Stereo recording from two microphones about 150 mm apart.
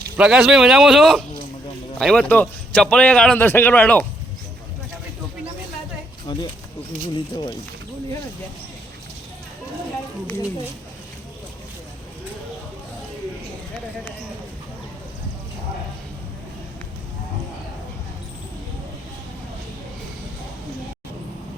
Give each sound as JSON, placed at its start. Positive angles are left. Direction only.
{"t": 0.2, "sound": "a man's voice", "side_deg": -5}
{"t": 6.3, "sound": "speech", "side_deg": 30}